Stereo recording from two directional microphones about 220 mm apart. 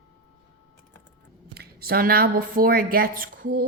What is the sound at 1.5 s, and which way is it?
Speech, 45° right (ahead or behind).